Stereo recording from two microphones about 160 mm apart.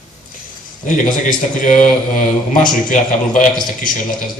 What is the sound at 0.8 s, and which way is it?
A man's voice, 55° left (ahead or behind).